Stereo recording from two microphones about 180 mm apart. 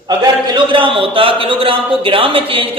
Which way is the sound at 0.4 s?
25° right (ahead or behind).